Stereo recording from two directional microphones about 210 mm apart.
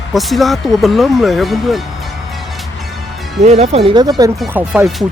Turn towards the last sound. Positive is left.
turn(degrees=-5)  # may be behind; listen again after turning